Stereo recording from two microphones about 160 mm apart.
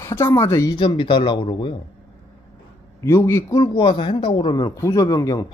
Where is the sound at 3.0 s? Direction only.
15° left (ahead or behind).